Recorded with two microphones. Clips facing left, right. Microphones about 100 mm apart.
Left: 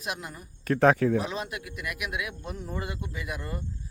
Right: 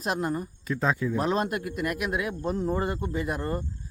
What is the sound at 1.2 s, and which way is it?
A man's voice, 45° right (ahead or behind).